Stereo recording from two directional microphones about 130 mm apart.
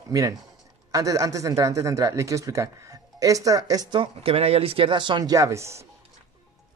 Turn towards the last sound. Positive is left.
turn(degrees=-20)  # may be behind; listen again after turning